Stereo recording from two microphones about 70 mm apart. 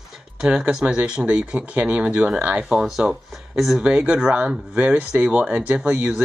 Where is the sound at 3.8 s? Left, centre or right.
Centre.